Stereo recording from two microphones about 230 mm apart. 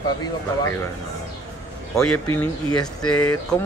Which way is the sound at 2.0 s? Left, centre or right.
Centre.